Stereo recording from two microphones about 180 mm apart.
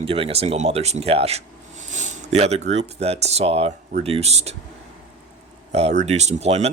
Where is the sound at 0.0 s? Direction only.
30° right (ahead or behind).